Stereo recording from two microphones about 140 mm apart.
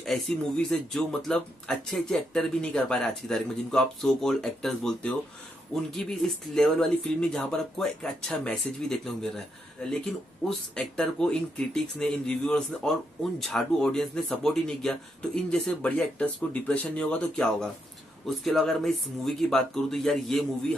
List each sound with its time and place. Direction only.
0.0 s speech: 5° left (ahead or behind)
10.7 s speech: 5° left (ahead or behind)